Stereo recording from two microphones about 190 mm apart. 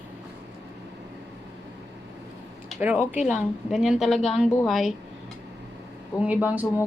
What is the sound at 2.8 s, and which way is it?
A woman's voice, 10° right (ahead or behind).